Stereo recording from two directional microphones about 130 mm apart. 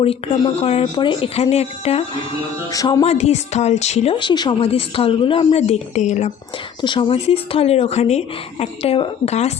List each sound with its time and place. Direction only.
0.6 s speech: 50° left (ahead or behind)
0.9 s speech: 40° left (ahead or behind)
2.7 s speech: 25° left (ahead or behind)
3.0 s speech: 55° left (ahead or behind)
4.2 s speech: 35° left (ahead or behind); by 6.3 s 60° left (ahead or behind)
6.8 s speech: 40° left (ahead or behind); by 9.5 s 55° left (ahead or behind)